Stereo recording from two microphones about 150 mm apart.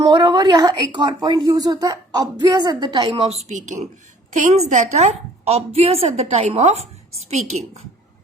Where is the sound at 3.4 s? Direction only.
55° right (ahead or behind).